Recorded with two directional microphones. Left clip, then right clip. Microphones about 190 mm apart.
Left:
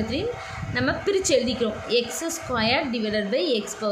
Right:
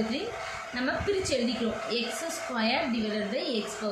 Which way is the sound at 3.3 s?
50° left (ahead or behind).